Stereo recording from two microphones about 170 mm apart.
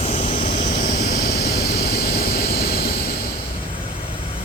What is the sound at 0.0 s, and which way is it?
Vehicle, 40° left (ahead or behind).